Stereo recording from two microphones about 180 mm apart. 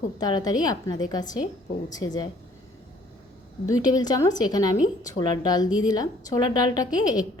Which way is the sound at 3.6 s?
20° left (ahead or behind).